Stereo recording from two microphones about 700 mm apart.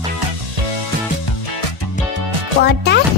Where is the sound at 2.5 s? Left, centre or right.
Right.